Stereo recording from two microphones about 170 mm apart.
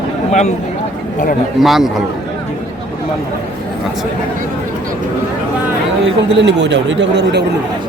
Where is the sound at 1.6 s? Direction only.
Centre (ahead or behind).